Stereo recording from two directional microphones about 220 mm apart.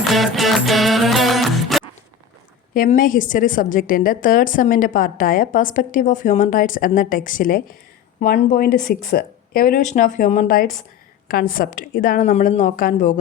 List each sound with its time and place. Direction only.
0.1 s music: centre (ahead or behind)
2.7 s a woman's voice: 40° left (ahead or behind)